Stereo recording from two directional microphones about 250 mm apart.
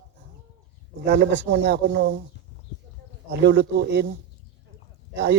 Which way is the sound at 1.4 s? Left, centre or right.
Right.